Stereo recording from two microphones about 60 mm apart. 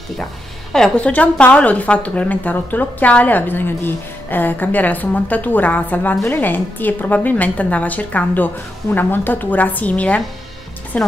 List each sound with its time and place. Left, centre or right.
0.9 s speech: left